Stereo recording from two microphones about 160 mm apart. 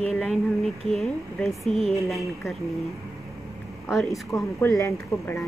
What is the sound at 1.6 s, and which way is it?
Speech, centre (ahead or behind).